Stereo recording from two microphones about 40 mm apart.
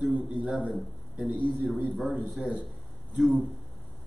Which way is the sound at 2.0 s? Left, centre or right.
Centre.